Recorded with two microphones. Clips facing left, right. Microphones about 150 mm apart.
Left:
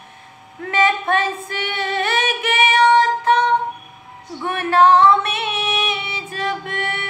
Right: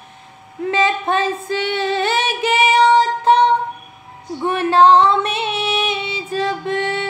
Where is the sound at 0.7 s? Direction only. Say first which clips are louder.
Even; 30° right (ahead or behind).